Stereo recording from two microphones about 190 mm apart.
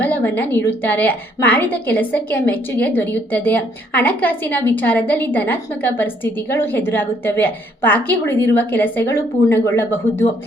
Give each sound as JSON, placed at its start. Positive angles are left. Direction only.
{"t": 0.0, "sound": "a woman's voice", "side_deg": 10}